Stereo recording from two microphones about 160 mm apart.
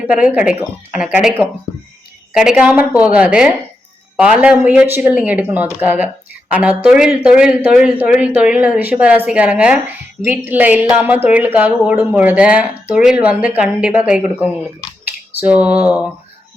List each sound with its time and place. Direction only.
0.1 s a woman's voice: 5° right (ahead or behind)
2.4 s a woman's voice: 5° right (ahead or behind)